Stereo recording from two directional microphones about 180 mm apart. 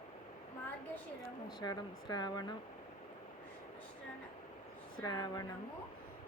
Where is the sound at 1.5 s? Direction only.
20° left (ahead or behind).